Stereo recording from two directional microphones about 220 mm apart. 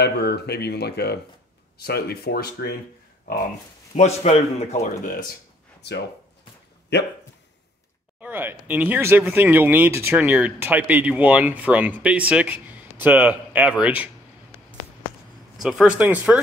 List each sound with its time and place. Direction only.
0.0 s speech: 45° left (ahead or behind)
3.9 s a man's voice: 30° left (ahead or behind)
5.8 s speech: 50° left (ahead or behind)
8.2 s speech: 10° right (ahead or behind)
15.6 s a man's voice: centre (ahead or behind)